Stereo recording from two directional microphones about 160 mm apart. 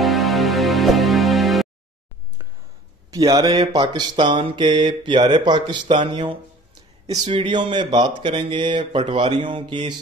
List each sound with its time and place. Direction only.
0.0 s music: centre (ahead or behind)
3.1 s mantra: 20° right (ahead or behind)
7.2 s speech: 35° right (ahead or behind)